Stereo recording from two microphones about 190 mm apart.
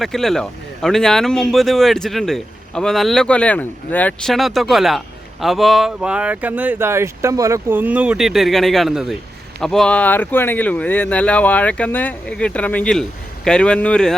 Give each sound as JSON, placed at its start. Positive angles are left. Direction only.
{"t": 0.0, "sound": "speech", "side_deg": 0}